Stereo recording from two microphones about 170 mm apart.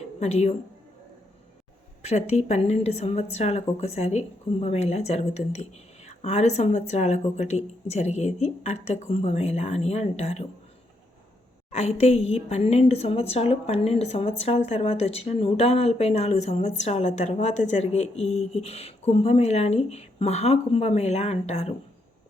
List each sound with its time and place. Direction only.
0.2 s speech: 40° left (ahead or behind)
2.0 s speech: 40° left (ahead or behind)
11.7 s speech: 40° left (ahead or behind)